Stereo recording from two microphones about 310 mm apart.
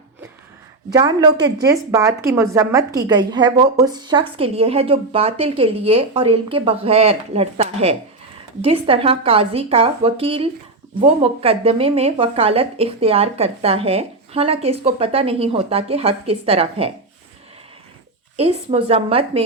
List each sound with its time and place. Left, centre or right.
0.9 s a woman's voice: centre
18.3 s speech: centre